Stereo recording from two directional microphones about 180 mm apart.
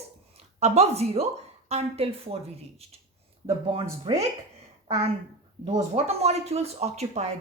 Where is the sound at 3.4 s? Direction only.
30° right (ahead or behind).